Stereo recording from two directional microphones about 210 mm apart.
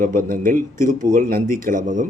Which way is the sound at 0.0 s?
40° right (ahead or behind).